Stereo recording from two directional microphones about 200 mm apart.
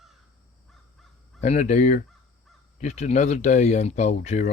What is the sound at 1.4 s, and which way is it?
Speech, 35° left (ahead or behind).